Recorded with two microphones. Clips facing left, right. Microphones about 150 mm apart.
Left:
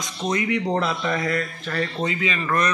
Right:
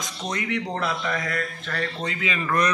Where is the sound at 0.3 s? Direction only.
20° left (ahead or behind).